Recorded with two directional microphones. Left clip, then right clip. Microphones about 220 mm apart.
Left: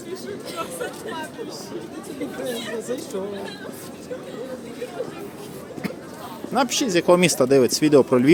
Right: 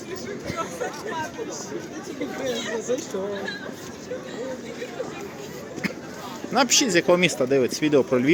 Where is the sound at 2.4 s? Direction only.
55° left (ahead or behind).